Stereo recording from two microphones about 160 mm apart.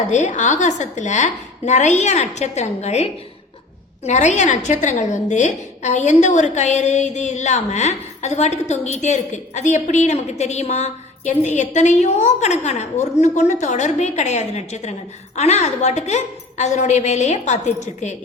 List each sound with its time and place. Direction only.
0.1 s a woman's voice: 50° left (ahead or behind)